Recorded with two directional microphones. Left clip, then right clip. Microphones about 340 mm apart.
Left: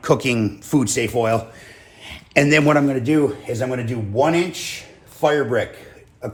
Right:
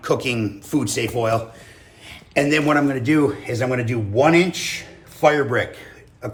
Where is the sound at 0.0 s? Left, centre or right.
Centre.